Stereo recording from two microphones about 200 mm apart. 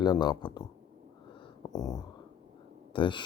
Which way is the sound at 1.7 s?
20° left (ahead or behind).